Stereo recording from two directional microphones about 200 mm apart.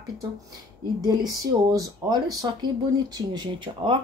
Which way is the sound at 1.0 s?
20° right (ahead or behind).